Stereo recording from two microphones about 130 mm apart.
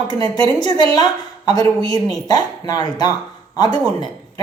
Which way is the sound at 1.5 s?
30° left (ahead or behind).